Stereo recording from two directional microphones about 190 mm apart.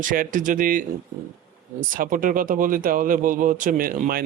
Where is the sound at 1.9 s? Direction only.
45° right (ahead or behind).